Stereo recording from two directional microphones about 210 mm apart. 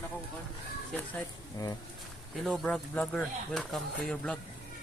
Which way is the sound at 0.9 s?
15° left (ahead or behind).